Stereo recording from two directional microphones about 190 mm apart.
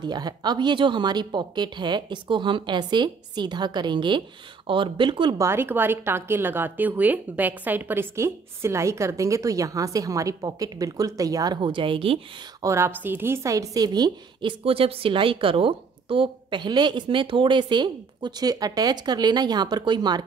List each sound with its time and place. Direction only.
0.0 s a woman's voice: 20° right (ahead or behind)
5.5 s a woman's voice: 10° right (ahead or behind); by 12.2 s 30° right (ahead or behind)
12.6 s a woman's voice: 15° right (ahead or behind)